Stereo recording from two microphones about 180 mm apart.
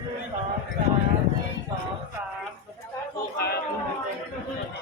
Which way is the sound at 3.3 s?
60° left (ahead or behind).